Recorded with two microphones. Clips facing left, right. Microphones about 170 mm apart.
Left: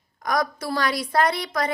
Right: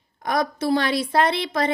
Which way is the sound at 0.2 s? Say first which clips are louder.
Right 2 dB; 25° right (ahead or behind).